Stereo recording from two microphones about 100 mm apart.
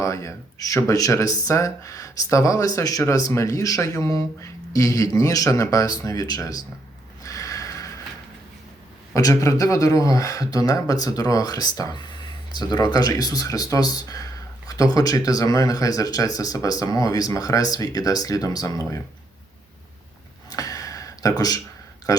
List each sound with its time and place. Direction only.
0.0 s speech: 30° left (ahead or behind)
7.2 s snort: 35° left (ahead or behind)
9.1 s speech: 35° left (ahead or behind)
20.5 s a sound: 35° left (ahead or behind)
22.1 s speech: 35° left (ahead or behind)